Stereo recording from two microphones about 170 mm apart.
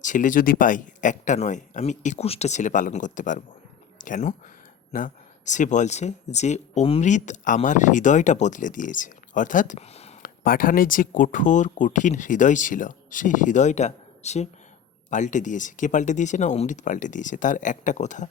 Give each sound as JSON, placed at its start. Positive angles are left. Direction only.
{"t": 0.0, "sound": "speech", "side_deg": 50}
{"t": 10.2, "sound": "speech", "side_deg": 55}